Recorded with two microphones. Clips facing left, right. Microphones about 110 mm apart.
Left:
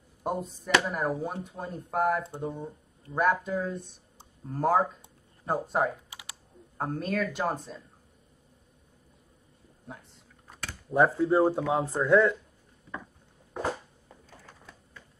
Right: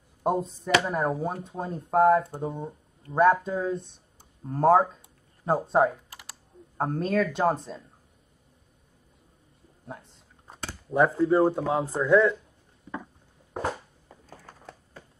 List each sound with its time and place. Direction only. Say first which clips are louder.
0.2 s speech: right 6 dB; 30° right (ahead or behind)
9.8 s a sound: right 4 dB; 30° right (ahead or behind)
10.9 s speech: right 1 dB; centre (ahead or behind)
14.4 s typing: right 5 dB; 40° right (ahead or behind)